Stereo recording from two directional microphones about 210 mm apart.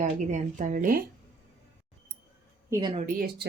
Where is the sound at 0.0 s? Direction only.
35° right (ahead or behind).